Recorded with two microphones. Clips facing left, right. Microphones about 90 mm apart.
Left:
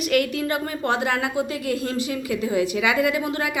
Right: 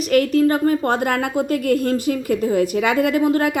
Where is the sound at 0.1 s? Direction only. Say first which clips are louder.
Right 7 dB; 40° right (ahead or behind).